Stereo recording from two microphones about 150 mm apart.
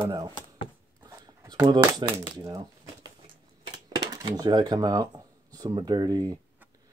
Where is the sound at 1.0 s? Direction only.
25° right (ahead or behind).